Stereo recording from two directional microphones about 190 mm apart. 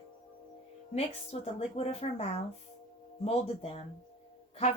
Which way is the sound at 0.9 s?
30° left (ahead or behind).